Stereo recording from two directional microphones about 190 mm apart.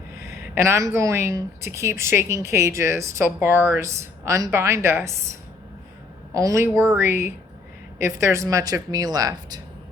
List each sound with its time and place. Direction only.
0.5 s a woman's voice: 15° right (ahead or behind)